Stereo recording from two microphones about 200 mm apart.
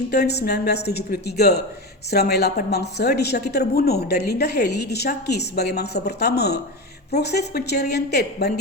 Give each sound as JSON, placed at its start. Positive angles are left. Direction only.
{"t": 0.1, "sound": "a woman's voice", "side_deg": 55}